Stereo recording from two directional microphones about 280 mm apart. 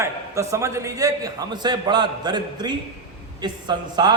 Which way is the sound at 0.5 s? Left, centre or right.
Centre.